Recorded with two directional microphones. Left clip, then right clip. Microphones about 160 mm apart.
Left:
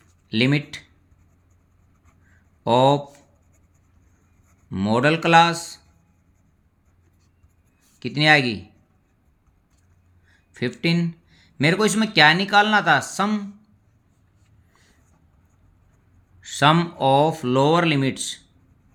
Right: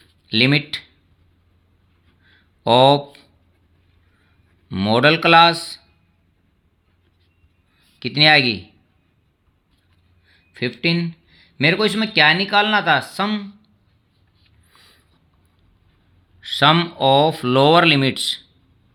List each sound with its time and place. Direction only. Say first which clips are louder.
0.3 s speech: right 5 dB; 25° right (ahead or behind)
2.6 s speech: right 4 dB; 20° right (ahead or behind)
4.7 s speech: right 5 dB; 20° right (ahead or behind)
7.9 s speech: right 4 dB; 15° right (ahead or behind)
10.2 s speech: right 3 dB; centre (ahead or behind)
16.4 s speech: right 3 dB; 10° right (ahead or behind)